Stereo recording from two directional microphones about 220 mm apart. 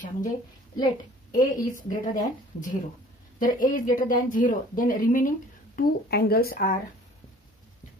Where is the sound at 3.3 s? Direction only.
40° left (ahead or behind).